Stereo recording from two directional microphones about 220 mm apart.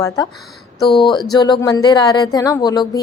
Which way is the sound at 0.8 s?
20° left (ahead or behind).